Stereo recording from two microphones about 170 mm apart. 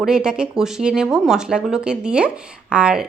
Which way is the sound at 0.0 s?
5° right (ahead or behind).